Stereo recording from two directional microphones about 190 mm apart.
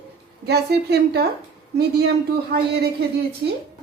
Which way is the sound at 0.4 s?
60° right (ahead or behind).